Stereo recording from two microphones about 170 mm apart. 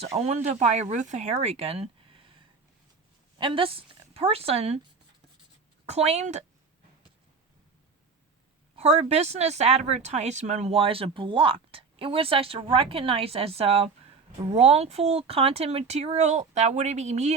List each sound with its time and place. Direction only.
0.2 s speech: 40° right (ahead or behind)
3.3 s a woman's voice: 30° right (ahead or behind)
5.8 s speech: 40° right (ahead or behind)
8.7 s speech: 40° right (ahead or behind)